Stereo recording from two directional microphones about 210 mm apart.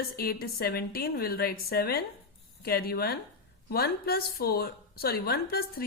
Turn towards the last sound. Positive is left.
turn(degrees=45)  # may be behind; listen again after turning